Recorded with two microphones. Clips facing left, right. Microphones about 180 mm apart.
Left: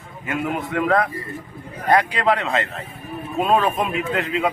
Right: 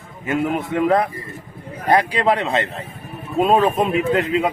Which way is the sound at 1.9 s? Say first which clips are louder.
Right 1 dB; 30° right (ahead or behind).